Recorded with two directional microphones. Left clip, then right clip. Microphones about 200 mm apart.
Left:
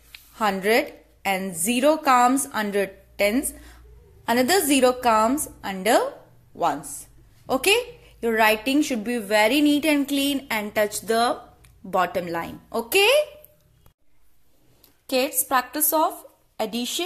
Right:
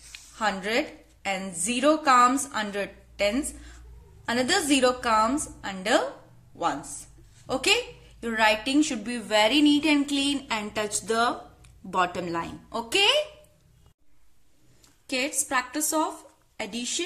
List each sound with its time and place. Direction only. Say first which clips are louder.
0.1 s a woman's voice: left 4 dB; 25° left (ahead or behind)
15.0 s a woman's voice: left 5 dB; 20° left (ahead or behind)